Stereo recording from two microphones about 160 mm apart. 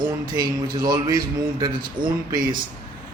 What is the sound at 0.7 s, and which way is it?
Speech, 25° right (ahead or behind).